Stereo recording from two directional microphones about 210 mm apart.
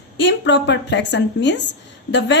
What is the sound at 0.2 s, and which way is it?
A woman's voice, 60° left (ahead or behind).